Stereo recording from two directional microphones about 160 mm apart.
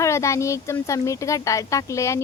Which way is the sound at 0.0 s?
20° left (ahead or behind).